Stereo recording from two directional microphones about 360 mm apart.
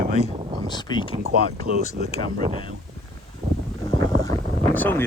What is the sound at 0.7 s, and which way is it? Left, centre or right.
Speech, centre.